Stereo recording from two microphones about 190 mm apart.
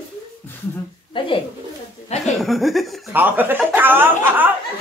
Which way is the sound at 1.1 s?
25° left (ahead or behind).